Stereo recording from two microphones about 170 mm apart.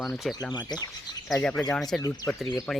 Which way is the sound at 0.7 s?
25° left (ahead or behind).